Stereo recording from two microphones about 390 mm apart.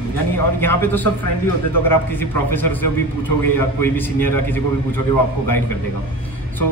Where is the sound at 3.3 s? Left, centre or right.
Left.